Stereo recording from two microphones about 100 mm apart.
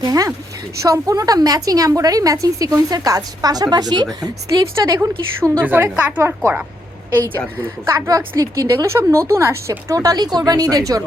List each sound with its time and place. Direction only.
0.0 s a woman's voice: 40° right (ahead or behind)
4.9 s a woman's voice: 20° right (ahead or behind)
7.9 s a woman's voice: 35° right (ahead or behind)